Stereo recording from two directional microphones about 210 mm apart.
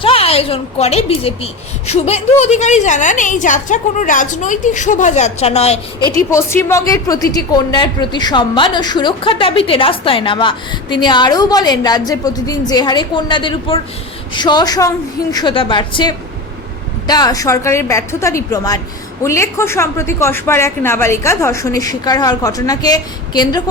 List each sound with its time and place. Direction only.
0.0 s a woman's voice: 25° left (ahead or behind)
6.3 s a woman's voice: 10° left (ahead or behind)